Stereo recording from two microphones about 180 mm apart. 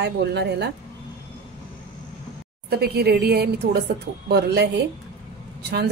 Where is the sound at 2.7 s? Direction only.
60° right (ahead or behind).